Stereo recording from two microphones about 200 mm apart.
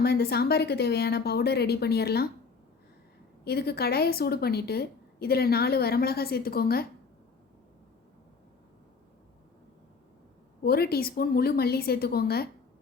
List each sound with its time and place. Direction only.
0.0 s a woman's voice: 55° left (ahead or behind)
3.4 s a woman's voice: 50° left (ahead or behind)
10.6 s a woman's voice: 50° left (ahead or behind)